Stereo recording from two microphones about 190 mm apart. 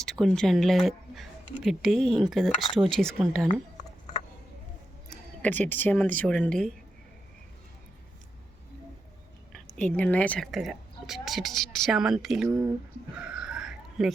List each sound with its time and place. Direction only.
0.0 s a woman's voice: centre (ahead or behind)
5.1 s speech: 10° left (ahead or behind)
9.5 s a woman's voice: 5° left (ahead or behind)
12.5 s speech: 20° right (ahead or behind)
13.2 s bird: 5° right (ahead or behind)